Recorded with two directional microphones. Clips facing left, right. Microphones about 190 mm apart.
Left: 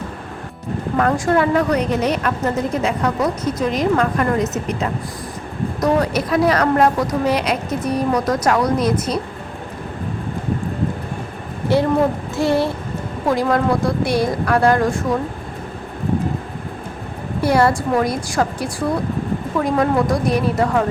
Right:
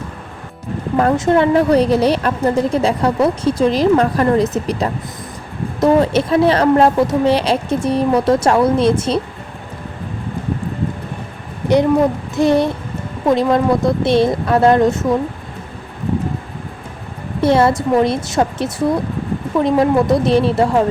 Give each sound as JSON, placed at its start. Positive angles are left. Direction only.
{"t": 0.9, "sound": "a woman's voice", "side_deg": -25}
{"t": 12.4, "sound": "a woman's voice", "side_deg": -20}
{"t": 17.4, "sound": "a woman's voice", "side_deg": -25}